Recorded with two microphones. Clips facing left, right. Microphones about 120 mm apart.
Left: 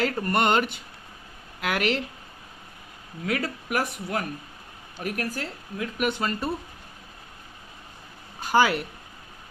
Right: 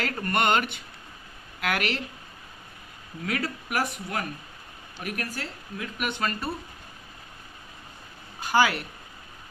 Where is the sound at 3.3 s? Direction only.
25° left (ahead or behind).